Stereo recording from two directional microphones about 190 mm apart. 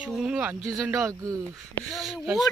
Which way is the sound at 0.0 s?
5° right (ahead or behind).